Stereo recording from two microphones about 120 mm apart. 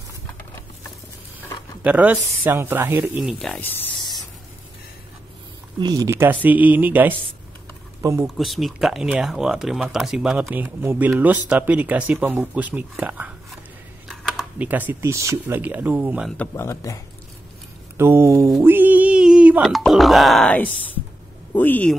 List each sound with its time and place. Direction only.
1.8 s speech: 15° right (ahead or behind)
3.2 s speech: 5° right (ahead or behind)
3.4 s speech: 15° left (ahead or behind)
5.8 s speech: 30° right (ahead or behind)
8.4 s speech: centre (ahead or behind)
14.0 s typing: 5° left (ahead or behind)
14.6 s speech: 15° right (ahead or behind)
16.6 s speech: 30° left (ahead or behind)
17.9 s a sound: 20° right (ahead or behind)
18.6 s music: 15° right (ahead or behind)
19.7 s speech: centre (ahead or behind)
20.5 s speech: 15° left (ahead or behind)